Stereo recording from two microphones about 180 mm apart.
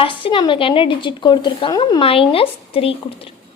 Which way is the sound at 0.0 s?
30° left (ahead or behind).